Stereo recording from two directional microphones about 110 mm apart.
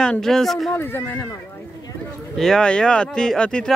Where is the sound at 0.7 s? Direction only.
20° left (ahead or behind).